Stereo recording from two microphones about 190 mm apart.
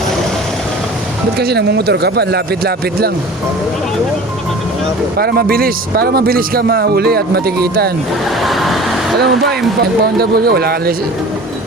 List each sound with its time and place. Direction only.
1.4 s speech: 60° right (ahead or behind)
5.1 s speech: 55° right (ahead or behind)
8.4 s vehicle: centre (ahead or behind)
9.1 s speech: 60° right (ahead or behind)